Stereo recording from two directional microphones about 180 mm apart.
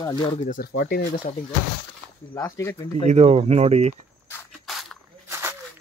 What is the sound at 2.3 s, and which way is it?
Speech, 15° left (ahead or behind).